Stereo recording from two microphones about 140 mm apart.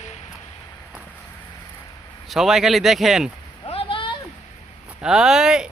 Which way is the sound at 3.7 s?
40° left (ahead or behind).